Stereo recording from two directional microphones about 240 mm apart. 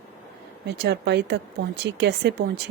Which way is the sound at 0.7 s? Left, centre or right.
Right.